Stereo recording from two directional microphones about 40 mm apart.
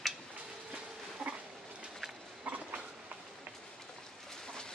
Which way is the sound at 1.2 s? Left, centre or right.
Right.